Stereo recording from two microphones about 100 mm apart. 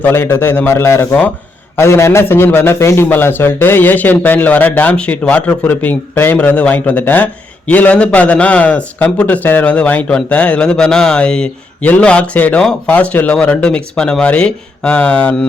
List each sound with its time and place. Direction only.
0.0 s a man's voice: 25° left (ahead or behind)